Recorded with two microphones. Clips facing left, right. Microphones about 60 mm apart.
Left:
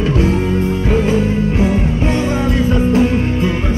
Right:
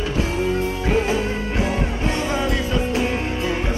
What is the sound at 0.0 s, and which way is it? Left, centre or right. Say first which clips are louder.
Music: left 7 dB; left.